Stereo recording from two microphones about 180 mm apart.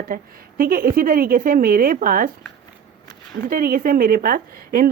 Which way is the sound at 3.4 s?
55° right (ahead or behind).